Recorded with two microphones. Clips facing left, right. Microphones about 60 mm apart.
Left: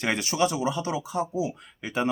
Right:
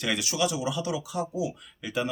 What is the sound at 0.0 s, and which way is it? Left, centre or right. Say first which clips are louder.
Speech: left 3 dB; left.